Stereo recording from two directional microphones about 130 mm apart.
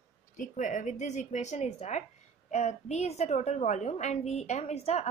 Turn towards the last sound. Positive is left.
turn(degrees=55)  # may be behind; listen again after turning